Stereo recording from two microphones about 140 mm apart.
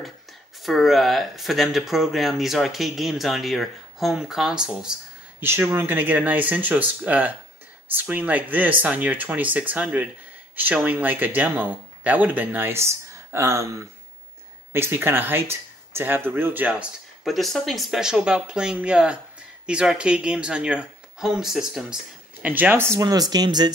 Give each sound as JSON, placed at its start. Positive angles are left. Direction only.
{"t": 0.6, "sound": "speech", "side_deg": 0}
{"t": 5.4, "sound": "speech", "side_deg": -15}
{"t": 14.7, "sound": "speech", "side_deg": -15}
{"t": 17.2, "sound": "speech", "side_deg": 0}
{"t": 22.9, "sound": "speech", "side_deg": -25}